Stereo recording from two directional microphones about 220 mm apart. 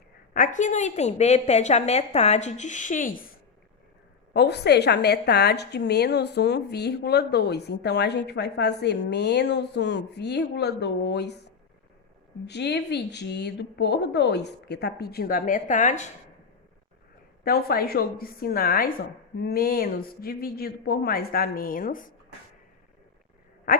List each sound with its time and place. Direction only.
0.3 s a woman's voice: 35° left (ahead or behind)
4.4 s a woman's voice: 50° left (ahead or behind)
12.5 s a woman's voice: 50° left (ahead or behind); by 16.1 s 35° left (ahead or behind)
17.4 s a woman's voice: 45° left (ahead or behind)
23.7 s a sound: 40° left (ahead or behind)